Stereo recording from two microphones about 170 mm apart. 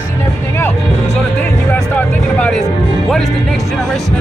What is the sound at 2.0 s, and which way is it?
Speech, 5° left (ahead or behind).